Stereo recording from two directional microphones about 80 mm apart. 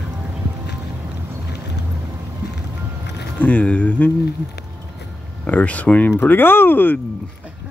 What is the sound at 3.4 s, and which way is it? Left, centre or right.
Speech, centre.